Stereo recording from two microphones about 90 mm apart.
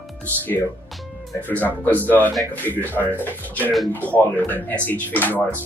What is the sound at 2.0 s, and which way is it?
Speech, 20° left (ahead or behind).